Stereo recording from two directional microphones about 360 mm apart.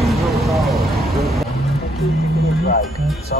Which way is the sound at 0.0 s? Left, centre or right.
Centre.